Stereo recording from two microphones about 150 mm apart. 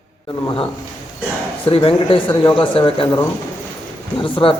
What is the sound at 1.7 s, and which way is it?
Speech, 35° left (ahead or behind).